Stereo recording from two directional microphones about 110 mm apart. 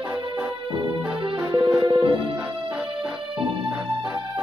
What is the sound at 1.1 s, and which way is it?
Music, 50° right (ahead or behind).